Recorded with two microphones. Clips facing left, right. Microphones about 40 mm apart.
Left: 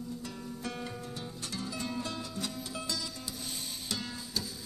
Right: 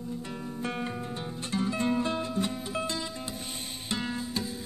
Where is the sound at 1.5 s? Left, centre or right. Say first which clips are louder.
Right 10 dB; right.